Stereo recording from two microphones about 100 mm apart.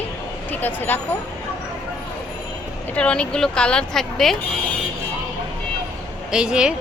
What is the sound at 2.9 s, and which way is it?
A woman's voice, 10° left (ahead or behind).